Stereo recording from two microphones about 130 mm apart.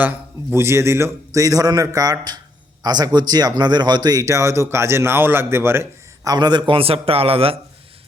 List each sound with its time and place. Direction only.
0.0 s a man's voice: 15° right (ahead or behind)
6.3 s a man's voice: 35° right (ahead or behind)